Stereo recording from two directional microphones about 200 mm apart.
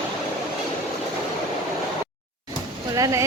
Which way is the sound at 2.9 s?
15° right (ahead or behind).